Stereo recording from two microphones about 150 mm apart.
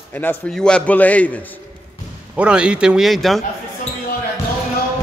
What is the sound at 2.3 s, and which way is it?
Speech, 5° right (ahead or behind).